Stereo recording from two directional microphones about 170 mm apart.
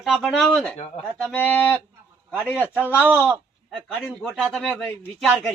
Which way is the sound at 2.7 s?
10° right (ahead or behind).